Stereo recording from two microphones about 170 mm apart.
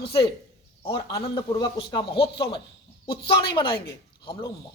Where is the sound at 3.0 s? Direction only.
65° left (ahead or behind).